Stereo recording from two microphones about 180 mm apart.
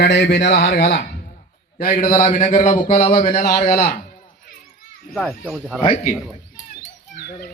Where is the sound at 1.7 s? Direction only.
50° left (ahead or behind).